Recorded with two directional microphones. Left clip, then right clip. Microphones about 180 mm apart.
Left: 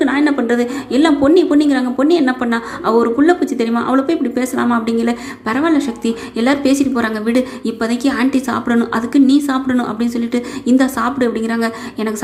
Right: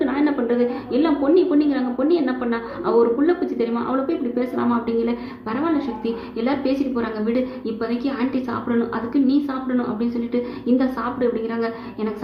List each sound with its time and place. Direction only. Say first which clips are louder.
0.0 s a woman's voice: left 6 dB; 30° left (ahead or behind)